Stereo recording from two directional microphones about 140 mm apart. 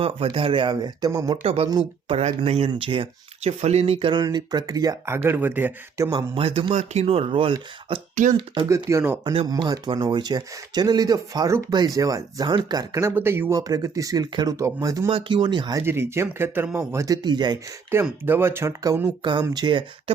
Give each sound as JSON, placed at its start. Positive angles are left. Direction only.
{"t": 0.0, "sound": "speech", "side_deg": -40}
{"t": 1.4, "sound": "speech", "side_deg": -45}
{"t": 2.6, "sound": "speech", "side_deg": -40}
{"t": 4.1, "sound": "speech", "side_deg": -30}
{"t": 6.1, "sound": "speech", "side_deg": -35}
{"t": 8.1, "sound": "speech", "side_deg": -65}
{"t": 8.6, "sound": "speech", "side_deg": -20}
{"t": 15.1, "sound": "speech", "side_deg": -35}
{"t": 15.8, "sound": "speech", "side_deg": -15}
{"t": 18.0, "sound": "speech", "side_deg": -15}